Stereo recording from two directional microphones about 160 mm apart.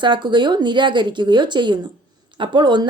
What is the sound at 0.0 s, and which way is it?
A woman's voice, 30° right (ahead or behind).